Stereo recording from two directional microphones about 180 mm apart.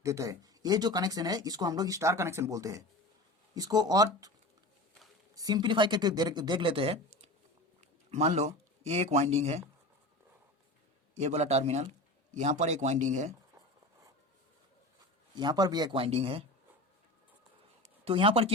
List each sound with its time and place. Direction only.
0.0 s speech: 15° right (ahead or behind)
5.3 s speech: 20° right (ahead or behind); by 9.6 s 35° right (ahead or behind)
11.1 s speech: 40° right (ahead or behind)
15.4 s speech: 25° right (ahead or behind)
18.0 s speech: 30° right (ahead or behind)